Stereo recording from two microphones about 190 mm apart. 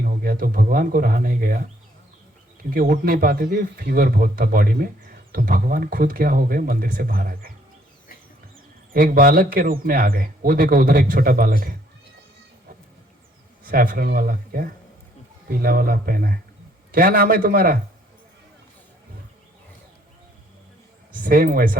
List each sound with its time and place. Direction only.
0.0 s speech: 50° right (ahead or behind)
2.7 s speech: 50° right (ahead or behind)
8.9 s speech: 50° right (ahead or behind)
13.7 s speech: 50° right (ahead or behind)
21.1 s speech: 45° right (ahead or behind)